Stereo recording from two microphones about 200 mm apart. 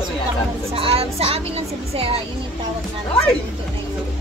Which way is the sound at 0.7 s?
30° right (ahead or behind).